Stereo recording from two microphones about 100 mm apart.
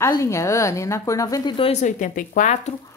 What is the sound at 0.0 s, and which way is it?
A woman's voice, 35° left (ahead or behind).